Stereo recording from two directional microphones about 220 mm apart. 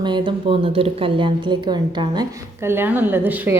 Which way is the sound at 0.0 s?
20° right (ahead or behind).